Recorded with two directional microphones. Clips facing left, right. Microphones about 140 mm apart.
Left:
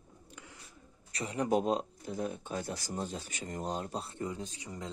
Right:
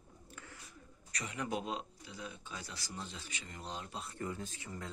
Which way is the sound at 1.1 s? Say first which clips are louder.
Left 9 dB; 35° left (ahead or behind).